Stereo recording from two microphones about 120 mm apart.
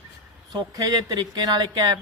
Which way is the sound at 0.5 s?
30° right (ahead or behind).